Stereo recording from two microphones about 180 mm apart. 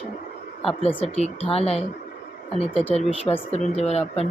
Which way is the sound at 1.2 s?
35° left (ahead or behind).